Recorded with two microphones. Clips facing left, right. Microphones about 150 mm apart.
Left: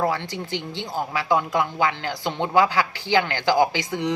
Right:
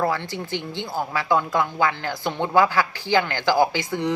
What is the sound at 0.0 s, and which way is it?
A woman's voice, 15° left (ahead or behind).